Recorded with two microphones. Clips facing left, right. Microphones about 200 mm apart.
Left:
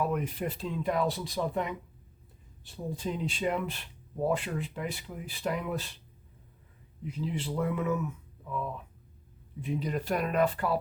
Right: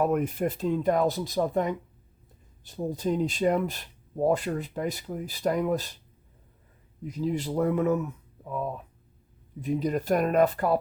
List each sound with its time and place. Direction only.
0.0 s speech: 50° right (ahead or behind)
7.0 s speech: 40° right (ahead or behind)
9.6 s speech: 40° right (ahead or behind)